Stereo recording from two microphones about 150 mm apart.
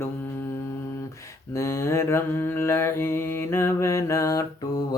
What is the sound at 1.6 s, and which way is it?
Mantra, 20° left (ahead or behind).